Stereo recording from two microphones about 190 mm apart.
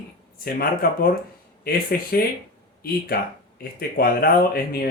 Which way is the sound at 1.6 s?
50° left (ahead or behind).